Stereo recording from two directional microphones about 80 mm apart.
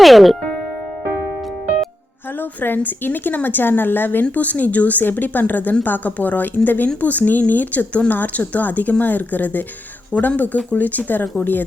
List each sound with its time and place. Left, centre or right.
0.0 s speech: centre
2.3 s a woman's voice: left